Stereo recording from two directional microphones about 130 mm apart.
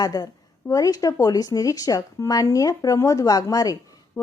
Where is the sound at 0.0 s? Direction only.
30° left (ahead or behind).